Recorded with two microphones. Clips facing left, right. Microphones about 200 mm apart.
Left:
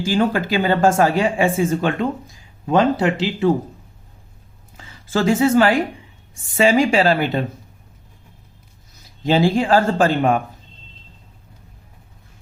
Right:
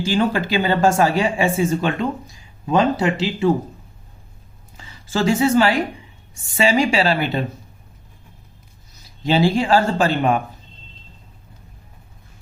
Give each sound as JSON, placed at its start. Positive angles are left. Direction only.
{"t": 0.0, "sound": "speech", "side_deg": 45}
{"t": 4.8, "sound": "a woman's voice", "side_deg": 55}
{"t": 9.2, "sound": "speech", "side_deg": 50}